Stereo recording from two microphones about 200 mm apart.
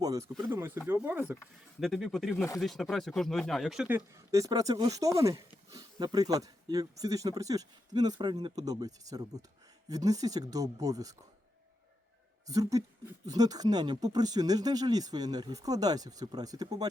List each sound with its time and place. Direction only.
0.0 s speech: 15° right (ahead or behind)
12.5 s speech: 15° right (ahead or behind)